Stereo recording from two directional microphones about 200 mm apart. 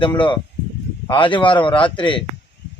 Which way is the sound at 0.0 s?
25° left (ahead or behind).